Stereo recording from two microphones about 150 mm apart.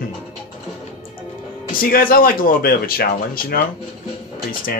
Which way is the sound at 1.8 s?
70° left (ahead or behind).